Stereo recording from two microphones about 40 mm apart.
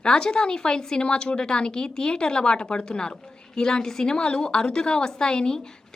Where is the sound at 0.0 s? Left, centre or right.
Left.